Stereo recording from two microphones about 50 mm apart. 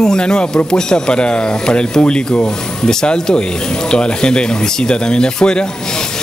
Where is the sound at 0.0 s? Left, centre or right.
Centre.